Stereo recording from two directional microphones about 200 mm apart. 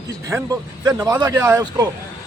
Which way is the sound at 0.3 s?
15° right (ahead or behind).